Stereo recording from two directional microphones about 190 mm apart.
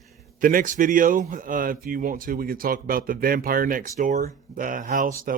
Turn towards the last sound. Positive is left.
turn(degrees=-45)  # may be behind; listen again after turning